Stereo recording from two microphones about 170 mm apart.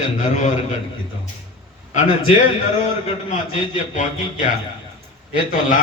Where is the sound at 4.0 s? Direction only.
50° left (ahead or behind).